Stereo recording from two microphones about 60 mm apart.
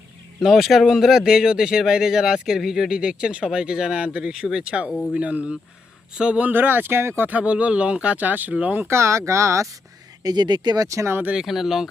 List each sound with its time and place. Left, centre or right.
0.3 s speech: centre
6.5 s speech: right
7.3 s speech: right
8.9 s speech: right
10.8 s speech: right
11.4 s speech: centre